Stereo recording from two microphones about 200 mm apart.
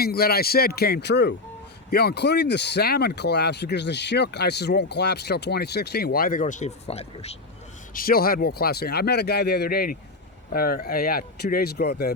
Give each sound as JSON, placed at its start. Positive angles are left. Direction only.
{"t": 0.0, "sound": "speech", "side_deg": 50}
{"t": 7.9, "sound": "speech", "side_deg": 45}